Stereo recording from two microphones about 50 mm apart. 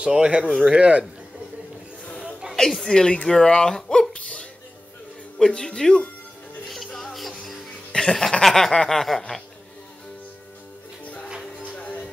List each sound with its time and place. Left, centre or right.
0.0 s speech: centre
2.5 s speech: centre
4.1 s music: left
5.5 s speech: centre
6.7 s music: centre
7.9 s a sound: centre
8.7 s speech: centre
11.7 s music: left